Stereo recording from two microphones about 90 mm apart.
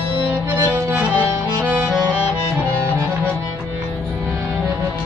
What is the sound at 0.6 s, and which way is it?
Music, 35° right (ahead or behind).